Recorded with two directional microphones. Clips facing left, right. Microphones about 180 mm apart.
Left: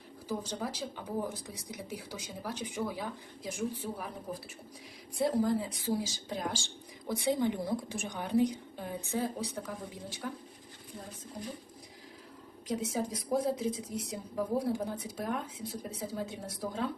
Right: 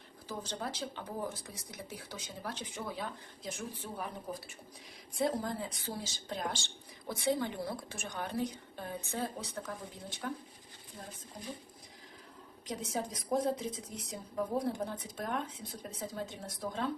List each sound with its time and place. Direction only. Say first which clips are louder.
0.3 s speech: left 4 dB; 10° left (ahead or behind)
12.6 s speech: left 4 dB; 5° left (ahead or behind)